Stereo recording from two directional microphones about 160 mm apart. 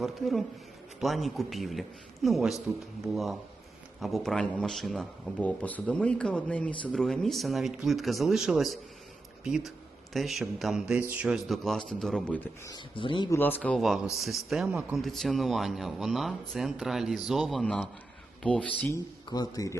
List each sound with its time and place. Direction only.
0.0 s a man's voice: centre (ahead or behind)
4.0 s a man's voice: centre (ahead or behind)
12.6 s speech: 30° left (ahead or behind)
13.3 s a man's voice: 10° left (ahead or behind)
18.9 s speech: 25° left (ahead or behind)